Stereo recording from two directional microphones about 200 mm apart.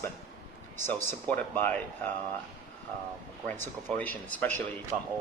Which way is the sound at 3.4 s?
10° left (ahead or behind).